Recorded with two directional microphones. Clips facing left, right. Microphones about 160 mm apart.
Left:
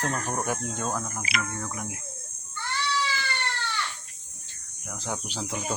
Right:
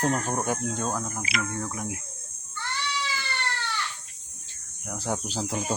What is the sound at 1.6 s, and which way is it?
Speech, 5° right (ahead or behind).